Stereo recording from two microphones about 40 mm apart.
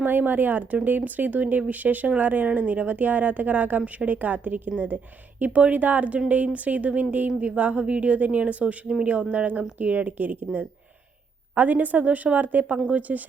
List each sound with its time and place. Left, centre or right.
0.0 s a woman's voice: right
12.7 s a woman's voice: right